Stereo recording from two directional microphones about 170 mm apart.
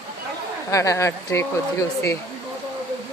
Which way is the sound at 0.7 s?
20° left (ahead or behind).